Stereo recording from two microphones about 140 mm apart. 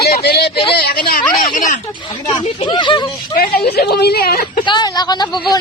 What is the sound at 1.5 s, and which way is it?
Speech, 65° left (ahead or behind).